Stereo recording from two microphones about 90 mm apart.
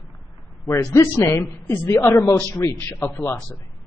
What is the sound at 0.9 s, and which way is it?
A woman's voice, 30° left (ahead or behind).